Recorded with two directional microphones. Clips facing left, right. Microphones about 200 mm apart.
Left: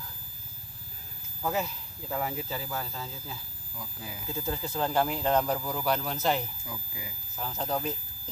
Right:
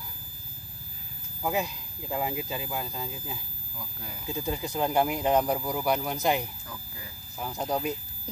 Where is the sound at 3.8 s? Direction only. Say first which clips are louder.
Left 1 dB; centre (ahead or behind).